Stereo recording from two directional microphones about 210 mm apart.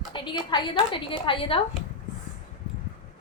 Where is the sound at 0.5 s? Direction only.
25° left (ahead or behind).